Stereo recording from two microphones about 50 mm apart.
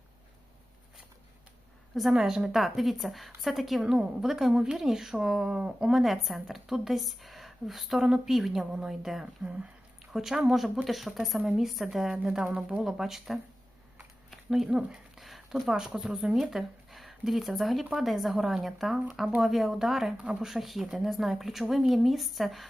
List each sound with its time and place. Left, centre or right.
2.1 s a woman's voice: centre
5.9 s a woman's voice: centre
9.2 s speech: right
10.1 s a woman's voice: centre
12.5 s speech: centre
12.8 s a woman's voice: centre
14.3 s a sound: centre
14.8 s a woman's voice: centre
15.2 s a sound: centre
16.0 s a woman's voice: centre